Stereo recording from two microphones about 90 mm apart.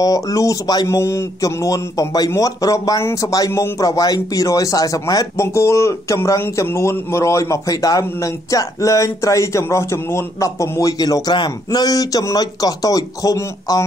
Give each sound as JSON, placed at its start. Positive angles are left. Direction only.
{"t": 0.0, "sound": "speech", "side_deg": 40}
{"t": 0.8, "sound": "speech", "side_deg": 30}